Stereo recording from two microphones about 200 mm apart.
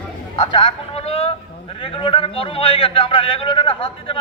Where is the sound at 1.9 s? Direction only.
25° left (ahead or behind).